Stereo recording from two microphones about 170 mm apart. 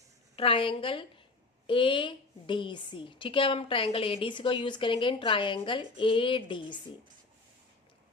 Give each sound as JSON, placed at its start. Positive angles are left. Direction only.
{"t": 0.3, "sound": "a woman's voice", "side_deg": 30}